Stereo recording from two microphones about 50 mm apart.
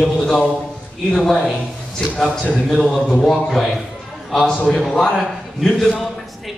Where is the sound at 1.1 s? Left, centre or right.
Centre.